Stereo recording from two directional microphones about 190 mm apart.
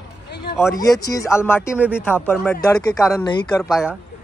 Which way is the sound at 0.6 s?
15° left (ahead or behind).